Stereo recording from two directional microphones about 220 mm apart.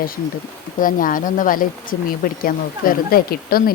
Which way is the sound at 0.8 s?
40° left (ahead or behind).